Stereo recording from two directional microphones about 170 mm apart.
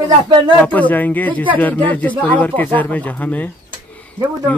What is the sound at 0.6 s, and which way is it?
Speech, 10° left (ahead or behind).